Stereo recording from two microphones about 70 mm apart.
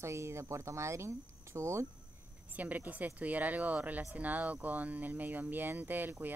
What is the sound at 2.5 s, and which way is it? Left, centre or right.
Speech, right.